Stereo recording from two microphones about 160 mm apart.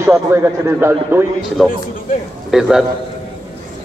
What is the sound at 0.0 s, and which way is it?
A man's voice, 15° right (ahead or behind).